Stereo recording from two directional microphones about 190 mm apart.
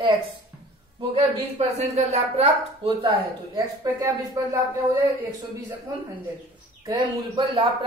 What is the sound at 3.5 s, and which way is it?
Speech, 15° right (ahead or behind).